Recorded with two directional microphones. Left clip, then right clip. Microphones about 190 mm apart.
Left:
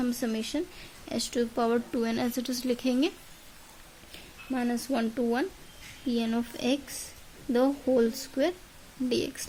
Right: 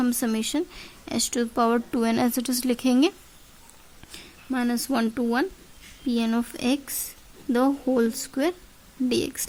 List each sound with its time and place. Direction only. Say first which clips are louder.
0.0 s speech: right 5 dB; 55° right (ahead or behind)
4.5 s speech: right 4 dB; 55° right (ahead or behind)